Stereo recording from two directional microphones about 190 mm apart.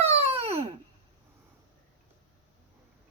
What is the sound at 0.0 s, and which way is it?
Babbling, 35° right (ahead or behind).